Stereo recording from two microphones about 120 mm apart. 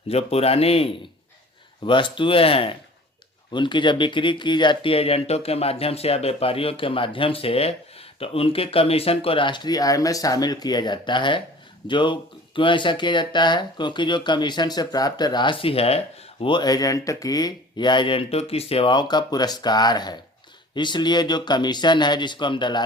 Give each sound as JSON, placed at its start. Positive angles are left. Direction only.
{"t": 0.1, "sound": "speech", "side_deg": 60}
{"t": 1.8, "sound": "speech", "side_deg": 45}
{"t": 16.5, "sound": "speech", "side_deg": 35}